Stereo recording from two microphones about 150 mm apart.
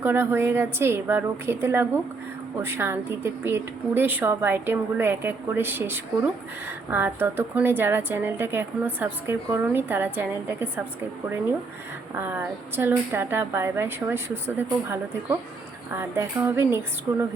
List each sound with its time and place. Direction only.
0.0 s speech: 15° right (ahead or behind)
12.1 s speech: 15° right (ahead or behind)